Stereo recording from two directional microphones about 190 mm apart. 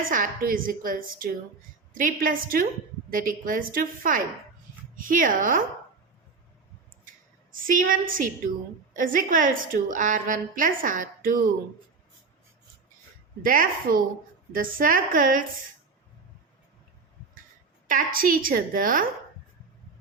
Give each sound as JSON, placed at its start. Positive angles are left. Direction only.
{"t": 0.0, "sound": "a woman's voice", "side_deg": -45}
{"t": 7.5, "sound": "a woman's voice", "side_deg": -45}
{"t": 13.4, "sound": "a woman's voice", "side_deg": -45}
{"t": 17.8, "sound": "a woman's voice", "side_deg": -45}